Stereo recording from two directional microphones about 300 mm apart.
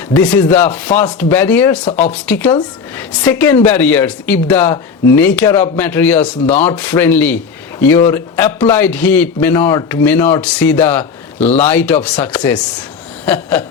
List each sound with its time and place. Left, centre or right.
0.1 s a man's voice: centre
1.8 s speech: left
2.1 s a man's voice: centre
13.2 s a sound: centre